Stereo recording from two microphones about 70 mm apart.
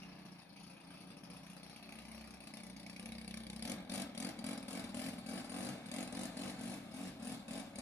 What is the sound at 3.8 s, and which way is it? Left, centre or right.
Vehicle, left.